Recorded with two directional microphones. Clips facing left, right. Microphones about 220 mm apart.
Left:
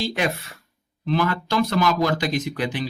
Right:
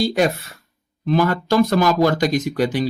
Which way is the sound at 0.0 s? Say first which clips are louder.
Right 6 dB; 40° right (ahead or behind).